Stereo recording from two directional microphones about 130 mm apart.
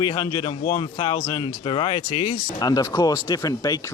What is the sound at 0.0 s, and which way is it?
Speech, 25° left (ahead or behind).